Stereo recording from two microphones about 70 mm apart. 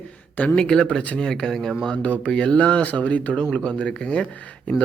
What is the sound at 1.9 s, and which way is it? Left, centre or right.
Speech, centre.